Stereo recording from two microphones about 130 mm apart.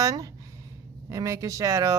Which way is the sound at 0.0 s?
25° right (ahead or behind).